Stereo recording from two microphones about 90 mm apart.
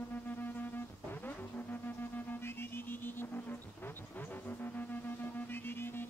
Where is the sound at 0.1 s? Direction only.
20° left (ahead or behind).